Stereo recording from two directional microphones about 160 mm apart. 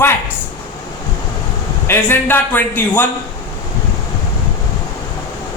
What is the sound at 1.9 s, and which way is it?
A man's voice, 15° left (ahead or behind).